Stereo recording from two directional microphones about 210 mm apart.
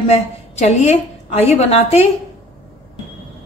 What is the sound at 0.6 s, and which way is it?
A woman's voice, 30° left (ahead or behind).